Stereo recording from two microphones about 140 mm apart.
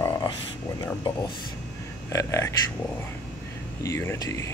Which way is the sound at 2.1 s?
20° left (ahead or behind).